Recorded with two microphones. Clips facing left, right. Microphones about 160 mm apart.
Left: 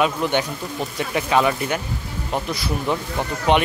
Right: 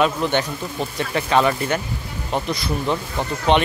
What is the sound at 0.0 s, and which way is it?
Speech, 10° left (ahead or behind).